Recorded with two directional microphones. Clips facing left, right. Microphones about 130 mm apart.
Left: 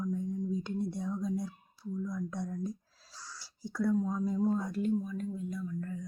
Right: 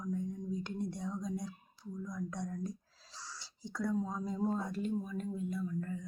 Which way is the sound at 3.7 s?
5° left (ahead or behind).